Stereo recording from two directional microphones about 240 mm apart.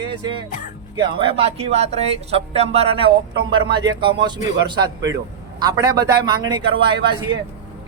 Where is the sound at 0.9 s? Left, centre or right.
Right.